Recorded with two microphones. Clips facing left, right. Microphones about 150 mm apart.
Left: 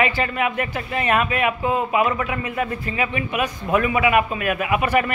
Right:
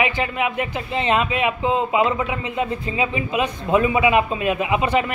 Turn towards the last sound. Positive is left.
turn(degrees=-20)  # may be behind; listen again after turning